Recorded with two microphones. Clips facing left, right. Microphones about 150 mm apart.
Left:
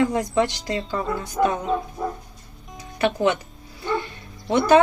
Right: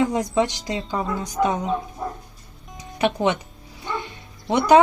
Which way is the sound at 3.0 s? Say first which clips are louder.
Even; 15° right (ahead or behind).